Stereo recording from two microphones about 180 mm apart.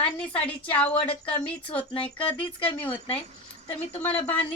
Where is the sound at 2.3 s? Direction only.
5° left (ahead or behind).